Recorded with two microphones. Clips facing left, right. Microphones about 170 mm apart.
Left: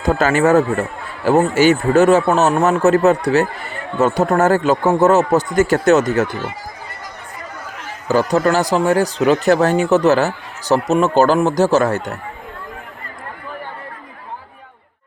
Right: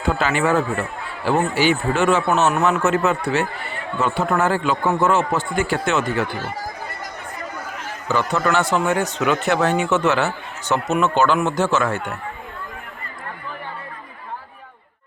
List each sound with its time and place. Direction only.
0.0 s speech: 40° left (ahead or behind)
8.0 s speech: 40° left (ahead or behind)